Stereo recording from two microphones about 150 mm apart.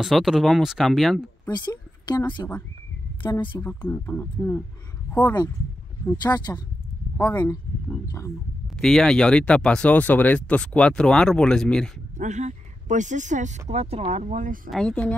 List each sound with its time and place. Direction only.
0.0 s speech: centre (ahead or behind)
1.5 s speech: 30° left (ahead or behind)
3.6 s speech: 15° left (ahead or behind)
6.2 s speech: 25° left (ahead or behind)
7.2 s speech: 15° left (ahead or behind)
8.7 s speech: 5° left (ahead or behind)
12.2 s speech: 50° right (ahead or behind)
14.7 s speech: 5° left (ahead or behind)